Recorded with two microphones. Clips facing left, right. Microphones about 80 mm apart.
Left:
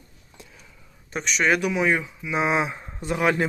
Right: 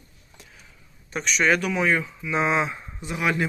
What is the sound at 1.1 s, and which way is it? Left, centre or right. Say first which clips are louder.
Speech: even; left.